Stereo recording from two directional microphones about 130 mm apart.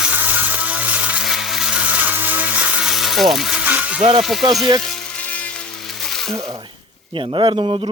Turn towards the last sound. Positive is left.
turn(degrees=-40)  # may be behind; listen again after turning